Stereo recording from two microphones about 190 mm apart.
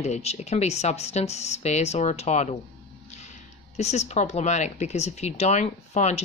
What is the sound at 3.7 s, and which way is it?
Speech, 35° left (ahead or behind).